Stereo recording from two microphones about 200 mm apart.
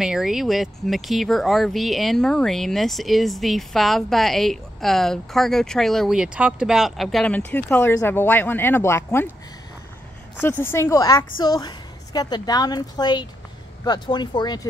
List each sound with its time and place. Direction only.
0.0 s speech: centre (ahead or behind)
10.4 s a woman's voice: 10° left (ahead or behind)